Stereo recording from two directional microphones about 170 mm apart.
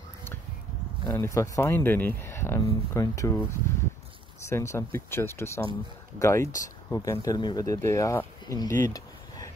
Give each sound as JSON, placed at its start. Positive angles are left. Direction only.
{"t": 1.0, "sound": "speech", "side_deg": 20}
{"t": 4.5, "sound": "speech", "side_deg": 15}